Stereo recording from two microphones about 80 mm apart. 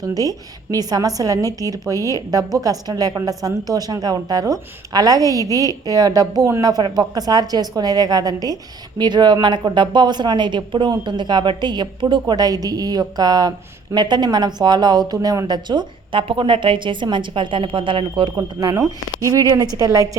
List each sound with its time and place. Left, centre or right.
0.0 s a woman's voice: right
9.0 s speech: right
12.3 s a woman's voice: right
13.9 s speech: right
18.3 s a woman's voice: right